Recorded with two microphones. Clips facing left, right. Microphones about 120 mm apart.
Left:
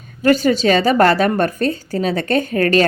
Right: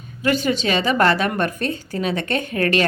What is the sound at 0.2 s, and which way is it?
A woman's voice, 40° left (ahead or behind).